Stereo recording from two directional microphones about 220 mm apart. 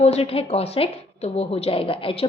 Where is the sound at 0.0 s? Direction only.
25° left (ahead or behind).